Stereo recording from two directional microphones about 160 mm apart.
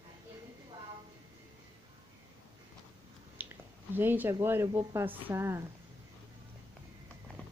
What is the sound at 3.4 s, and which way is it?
Finger snapping, 10° right (ahead or behind).